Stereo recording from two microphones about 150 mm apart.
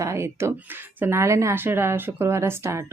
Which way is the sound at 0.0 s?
20° right (ahead or behind).